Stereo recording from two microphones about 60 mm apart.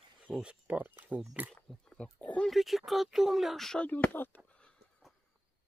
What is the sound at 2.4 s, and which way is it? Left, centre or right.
Speech, centre.